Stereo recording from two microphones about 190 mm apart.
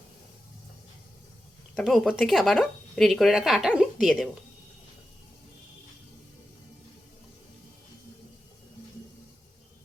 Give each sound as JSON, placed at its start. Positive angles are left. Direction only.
{"t": 1.7, "sound": "speech", "side_deg": 0}